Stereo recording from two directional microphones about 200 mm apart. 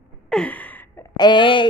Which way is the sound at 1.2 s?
25° left (ahead or behind).